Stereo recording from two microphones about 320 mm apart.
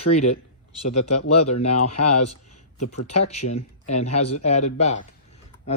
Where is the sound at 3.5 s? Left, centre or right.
Centre.